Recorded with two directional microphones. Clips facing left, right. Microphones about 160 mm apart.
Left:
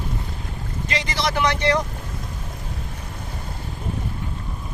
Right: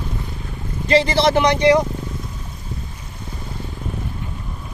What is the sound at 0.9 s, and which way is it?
Speech, 30° right (ahead or behind).